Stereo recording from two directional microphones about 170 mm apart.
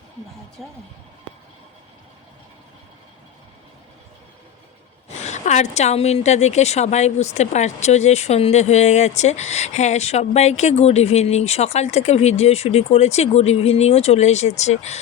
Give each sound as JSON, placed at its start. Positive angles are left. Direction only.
{"t": 0.6, "sound": "speech", "side_deg": 0}
{"t": 5.1, "sound": "speech", "side_deg": 40}